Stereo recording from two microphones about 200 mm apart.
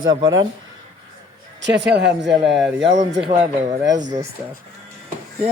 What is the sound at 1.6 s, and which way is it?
Speech, 60° right (ahead or behind).